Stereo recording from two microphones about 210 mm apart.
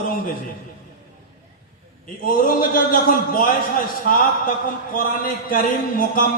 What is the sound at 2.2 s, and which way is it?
A man's voice, 45° left (ahead or behind).